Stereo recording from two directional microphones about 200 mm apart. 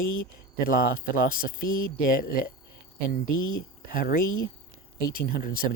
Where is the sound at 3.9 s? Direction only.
45° left (ahead or behind).